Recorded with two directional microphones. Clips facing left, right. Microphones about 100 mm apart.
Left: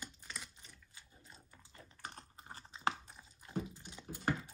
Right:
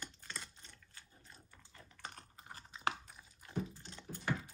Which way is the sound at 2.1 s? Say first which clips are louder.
Left 1 dB; 30° left (ahead or behind).